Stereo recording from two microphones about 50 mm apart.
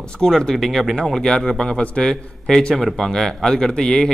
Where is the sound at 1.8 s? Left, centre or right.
Left.